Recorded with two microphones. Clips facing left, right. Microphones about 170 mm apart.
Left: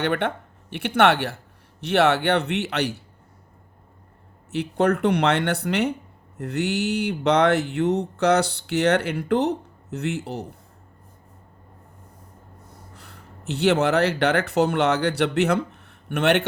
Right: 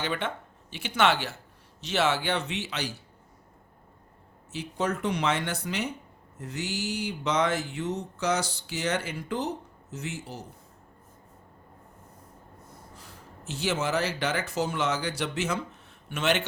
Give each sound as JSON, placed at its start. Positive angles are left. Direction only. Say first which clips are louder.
{"t": 0.0, "sound": "speech", "louder": "left 7 dB", "side_deg": 60}
{"t": 4.5, "sound": "speech", "louder": "left 9 dB", "side_deg": 65}
{"t": 13.0, "sound": "speech", "louder": "left 2 dB", "side_deg": 65}